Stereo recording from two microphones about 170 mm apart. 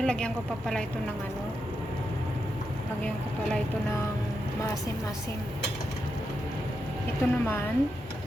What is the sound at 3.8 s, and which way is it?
A woman's voice, 15° left (ahead or behind).